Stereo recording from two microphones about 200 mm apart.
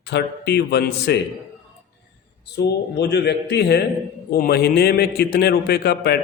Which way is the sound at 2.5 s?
55° left (ahead or behind).